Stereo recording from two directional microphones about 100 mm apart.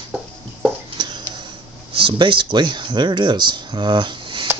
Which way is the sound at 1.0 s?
45° right (ahead or behind).